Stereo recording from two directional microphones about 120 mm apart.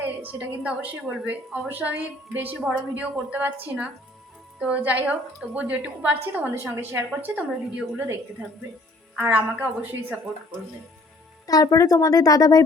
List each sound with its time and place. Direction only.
0.0 s a woman's voice: 15° right (ahead or behind)
11.4 s speech: 30° left (ahead or behind)